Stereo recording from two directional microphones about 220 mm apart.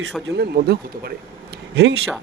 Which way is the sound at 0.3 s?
50° right (ahead or behind).